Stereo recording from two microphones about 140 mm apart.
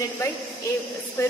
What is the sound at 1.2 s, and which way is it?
Speech, 20° left (ahead or behind).